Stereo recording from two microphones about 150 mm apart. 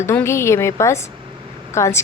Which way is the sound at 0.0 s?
15° left (ahead or behind).